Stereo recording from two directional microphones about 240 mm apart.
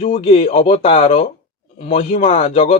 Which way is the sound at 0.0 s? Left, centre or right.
Left.